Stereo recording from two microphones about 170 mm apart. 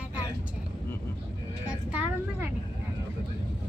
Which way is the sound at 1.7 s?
10° right (ahead or behind).